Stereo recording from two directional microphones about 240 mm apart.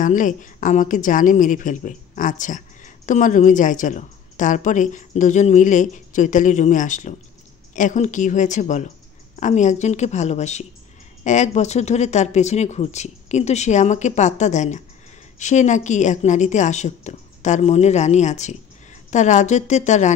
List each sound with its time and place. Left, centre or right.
0.0 s a woman's voice: left